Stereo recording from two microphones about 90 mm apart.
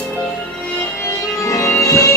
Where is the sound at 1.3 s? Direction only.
35° left (ahead or behind).